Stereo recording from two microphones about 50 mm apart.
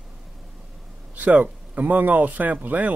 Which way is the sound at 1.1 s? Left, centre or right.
Right.